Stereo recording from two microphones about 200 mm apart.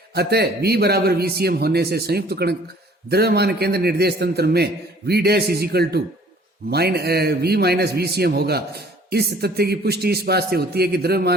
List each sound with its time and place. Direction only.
0.1 s a man's voice: 55° right (ahead or behind)